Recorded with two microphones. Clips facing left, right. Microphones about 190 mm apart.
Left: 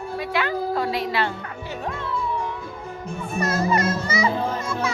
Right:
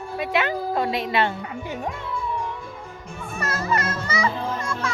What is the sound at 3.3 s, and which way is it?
Children playing, 15° left (ahead or behind).